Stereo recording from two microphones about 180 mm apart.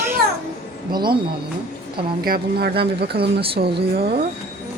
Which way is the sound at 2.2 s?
60° right (ahead or behind).